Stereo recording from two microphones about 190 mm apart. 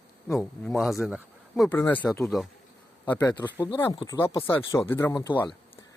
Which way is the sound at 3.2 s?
20° left (ahead or behind).